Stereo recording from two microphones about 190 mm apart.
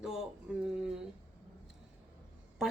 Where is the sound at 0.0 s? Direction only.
Centre (ahead or behind).